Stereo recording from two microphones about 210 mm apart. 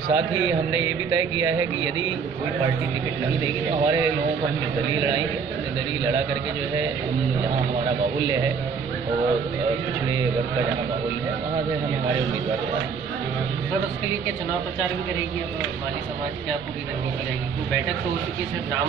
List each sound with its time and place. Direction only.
0.1 s a man's voice: 20° right (ahead or behind)
3.8 s a man's voice: 15° right (ahead or behind)